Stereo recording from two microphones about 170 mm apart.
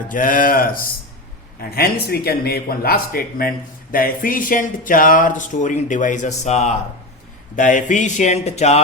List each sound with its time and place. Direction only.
0.1 s speech: 55° left (ahead or behind)